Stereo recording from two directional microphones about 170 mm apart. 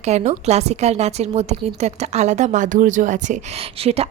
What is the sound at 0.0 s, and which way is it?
A woman's voice, 40° right (ahead or behind).